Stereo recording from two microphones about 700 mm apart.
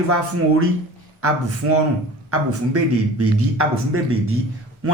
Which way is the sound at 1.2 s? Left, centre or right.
Centre.